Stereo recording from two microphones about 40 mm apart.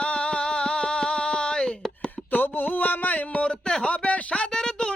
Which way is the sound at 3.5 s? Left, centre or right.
Centre.